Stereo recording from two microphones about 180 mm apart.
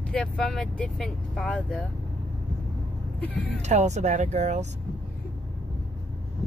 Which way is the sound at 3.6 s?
40° right (ahead or behind).